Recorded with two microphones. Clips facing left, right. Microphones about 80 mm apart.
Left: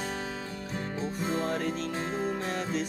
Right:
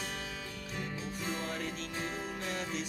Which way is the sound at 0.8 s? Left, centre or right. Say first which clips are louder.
Left 7 dB; left.